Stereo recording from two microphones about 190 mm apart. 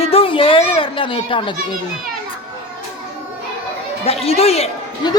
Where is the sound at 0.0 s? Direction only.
30° left (ahead or behind).